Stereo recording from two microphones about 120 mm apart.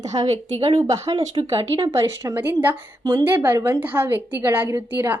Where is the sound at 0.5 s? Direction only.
50° right (ahead or behind).